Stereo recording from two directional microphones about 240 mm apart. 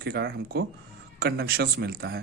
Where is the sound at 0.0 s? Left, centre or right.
Right.